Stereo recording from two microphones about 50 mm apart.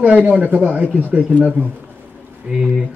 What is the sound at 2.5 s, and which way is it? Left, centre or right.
Speech, right.